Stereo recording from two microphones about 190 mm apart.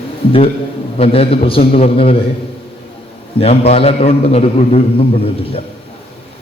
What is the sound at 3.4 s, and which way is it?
A man's voice, 30° left (ahead or behind).